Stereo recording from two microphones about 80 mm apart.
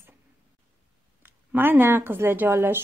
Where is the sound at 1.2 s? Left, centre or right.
Right.